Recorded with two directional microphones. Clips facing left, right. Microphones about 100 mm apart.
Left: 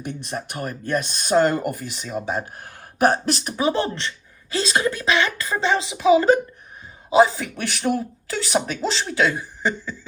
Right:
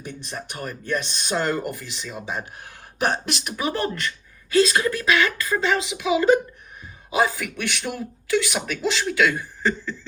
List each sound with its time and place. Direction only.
0.0 s speech: 55° left (ahead or behind); by 3.5 s 40° left (ahead or behind)
3.6 s speech: 25° left (ahead or behind)
9.3 s chuckle: 15° left (ahead or behind)